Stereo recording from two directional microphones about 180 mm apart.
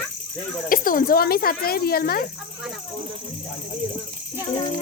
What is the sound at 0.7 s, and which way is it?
Speech, 50° left (ahead or behind).